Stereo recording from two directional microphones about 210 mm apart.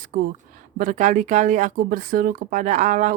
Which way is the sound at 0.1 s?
45° right (ahead or behind).